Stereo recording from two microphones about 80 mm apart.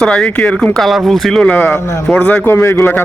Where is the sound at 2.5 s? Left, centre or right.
Left.